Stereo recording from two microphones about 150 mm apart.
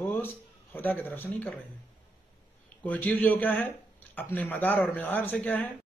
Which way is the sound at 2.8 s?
10° left (ahead or behind).